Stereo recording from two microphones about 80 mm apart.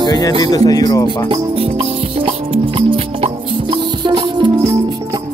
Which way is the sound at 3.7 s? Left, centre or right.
Right.